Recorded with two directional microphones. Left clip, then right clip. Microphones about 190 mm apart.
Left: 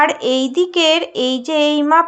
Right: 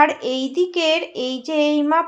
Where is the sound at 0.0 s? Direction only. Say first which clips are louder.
Left 3 dB; 25° left (ahead or behind).